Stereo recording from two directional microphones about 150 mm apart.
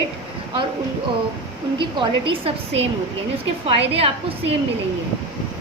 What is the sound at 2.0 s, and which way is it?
A woman's voice, 40° right (ahead or behind).